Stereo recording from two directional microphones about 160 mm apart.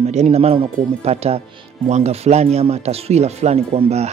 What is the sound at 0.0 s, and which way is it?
Speech, 45° right (ahead or behind).